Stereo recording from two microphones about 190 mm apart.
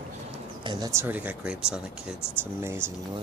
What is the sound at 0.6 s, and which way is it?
Speech, 20° right (ahead or behind).